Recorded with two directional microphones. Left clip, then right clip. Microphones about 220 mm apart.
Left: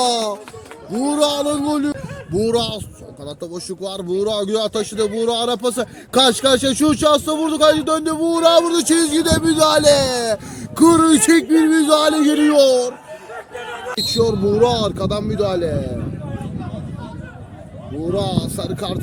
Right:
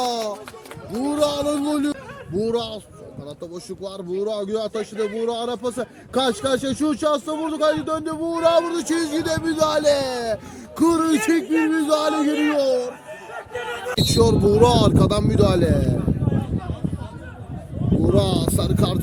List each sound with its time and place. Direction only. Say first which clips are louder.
0.0 s music: left 6 dB; 30° left (ahead or behind)
1.0 s speech: left 4 dB; 25° left (ahead or behind); by 2.0 s 10° left (ahead or behind)
2.3 s a man's voice: left 5 dB; 30° left (ahead or behind); by 12.9 s 50° left (ahead or behind)
14.4 s speech: right 1 dB; 15° right (ahead or behind)
18.1 s speech: even; 20° right (ahead or behind)